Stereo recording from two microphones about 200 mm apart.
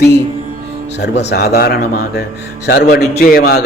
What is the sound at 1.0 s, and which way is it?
A man's voice, 55° left (ahead or behind).